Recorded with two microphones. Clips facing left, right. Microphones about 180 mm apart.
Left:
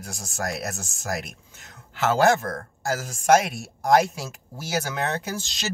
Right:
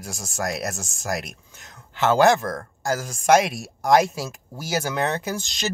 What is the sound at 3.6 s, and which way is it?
Speech, centre (ahead or behind).